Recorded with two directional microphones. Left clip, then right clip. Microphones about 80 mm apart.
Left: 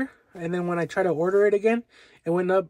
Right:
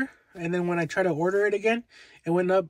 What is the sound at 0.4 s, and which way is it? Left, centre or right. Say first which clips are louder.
Speech: even; left.